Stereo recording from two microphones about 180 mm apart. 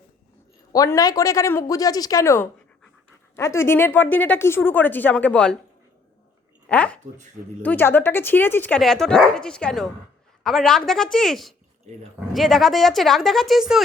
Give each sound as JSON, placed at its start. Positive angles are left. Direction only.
{"t": 0.7, "sound": "speech", "side_deg": 20}
{"t": 6.7, "sound": "a woman's voice", "side_deg": 5}